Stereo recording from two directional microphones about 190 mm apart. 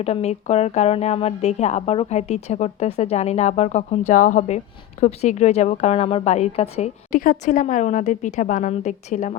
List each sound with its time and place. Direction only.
0.0 s a woman's voice: 35° left (ahead or behind)